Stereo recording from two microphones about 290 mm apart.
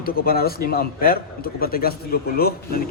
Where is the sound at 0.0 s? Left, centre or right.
Left.